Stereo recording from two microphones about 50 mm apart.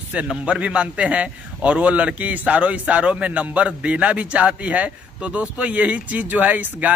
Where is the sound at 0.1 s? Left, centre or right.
Right.